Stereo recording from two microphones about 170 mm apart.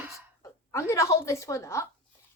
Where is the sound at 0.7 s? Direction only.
15° left (ahead or behind).